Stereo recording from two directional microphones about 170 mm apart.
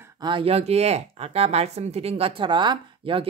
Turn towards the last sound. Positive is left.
turn(degrees=-30)  # may be behind; listen again after turning